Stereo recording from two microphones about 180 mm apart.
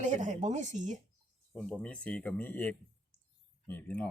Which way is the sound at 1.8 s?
10° left (ahead or behind).